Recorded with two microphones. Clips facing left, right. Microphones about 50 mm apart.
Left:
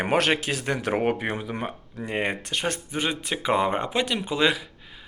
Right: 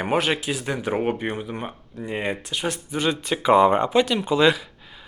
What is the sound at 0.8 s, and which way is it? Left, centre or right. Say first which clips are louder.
Speech: even; left.